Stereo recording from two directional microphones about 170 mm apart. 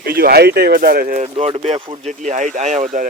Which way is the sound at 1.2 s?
35° right (ahead or behind).